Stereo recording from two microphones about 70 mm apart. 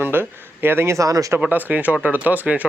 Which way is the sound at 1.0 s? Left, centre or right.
Right.